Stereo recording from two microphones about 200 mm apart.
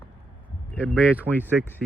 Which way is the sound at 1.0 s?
5° right (ahead or behind).